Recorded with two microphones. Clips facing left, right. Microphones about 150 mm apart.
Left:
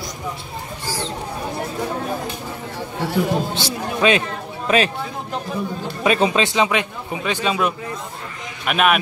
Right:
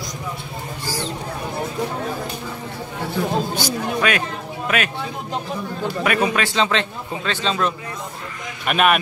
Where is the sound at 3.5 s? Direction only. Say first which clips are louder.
Right 1 dB; 25° left (ahead or behind).